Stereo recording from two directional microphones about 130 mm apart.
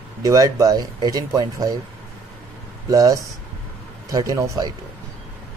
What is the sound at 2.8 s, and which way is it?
A man's voice, 25° right (ahead or behind).